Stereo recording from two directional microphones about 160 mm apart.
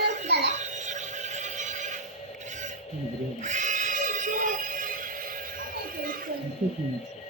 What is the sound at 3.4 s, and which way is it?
Music, 50° right (ahead or behind).